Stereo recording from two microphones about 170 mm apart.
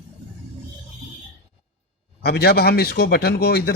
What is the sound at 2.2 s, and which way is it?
Speech, 70° left (ahead or behind).